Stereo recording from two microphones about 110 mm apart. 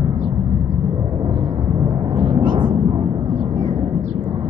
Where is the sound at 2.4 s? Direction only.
45° right (ahead or behind).